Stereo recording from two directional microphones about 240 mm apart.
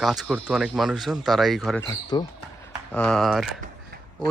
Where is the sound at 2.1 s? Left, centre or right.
Centre.